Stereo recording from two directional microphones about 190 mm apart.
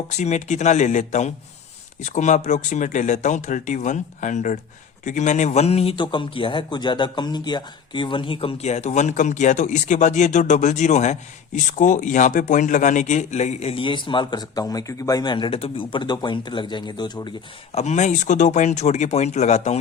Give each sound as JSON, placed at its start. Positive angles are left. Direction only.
{"t": 0.2, "sound": "speech", "side_deg": 35}